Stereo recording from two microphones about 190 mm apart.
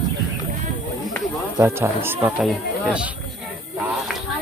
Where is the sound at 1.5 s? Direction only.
15° right (ahead or behind).